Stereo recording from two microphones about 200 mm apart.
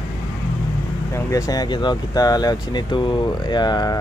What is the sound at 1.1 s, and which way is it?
Speech, 15° left (ahead or behind).